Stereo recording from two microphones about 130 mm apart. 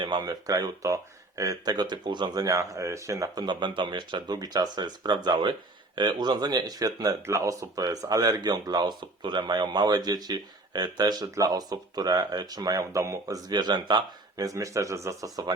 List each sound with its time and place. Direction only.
0.0 s speech: 35° right (ahead or behind)